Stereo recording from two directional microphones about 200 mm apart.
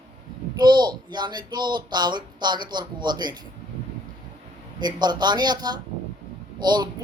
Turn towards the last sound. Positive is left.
turn(degrees=-20)  # may be behind; listen again after turning